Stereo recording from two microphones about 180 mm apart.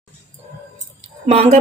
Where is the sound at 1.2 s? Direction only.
35° right (ahead or behind).